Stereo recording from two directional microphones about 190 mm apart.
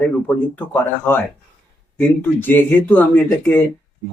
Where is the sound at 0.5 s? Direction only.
10° left (ahead or behind).